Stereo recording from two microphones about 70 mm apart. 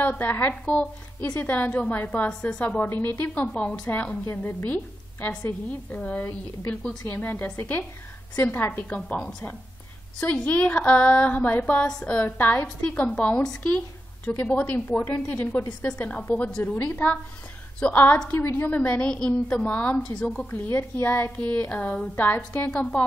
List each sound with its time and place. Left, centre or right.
0.0 s a woman's voice: left
2.8 s a woman's voice: left
10.2 s a woman's voice: left
15.9 s a woman's voice: centre
20.4 s a woman's voice: left
22.7 s a woman's voice: centre